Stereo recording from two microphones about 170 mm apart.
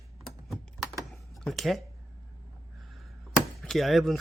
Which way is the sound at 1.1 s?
Centre (ahead or behind).